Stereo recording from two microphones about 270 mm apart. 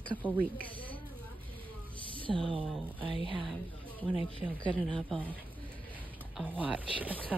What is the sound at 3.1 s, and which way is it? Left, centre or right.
Speech, centre.